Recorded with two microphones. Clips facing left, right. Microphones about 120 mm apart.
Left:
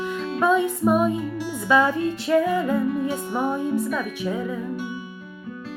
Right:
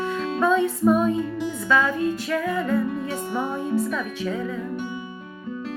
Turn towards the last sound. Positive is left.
turn(degrees=10)  # may be behind; listen again after turning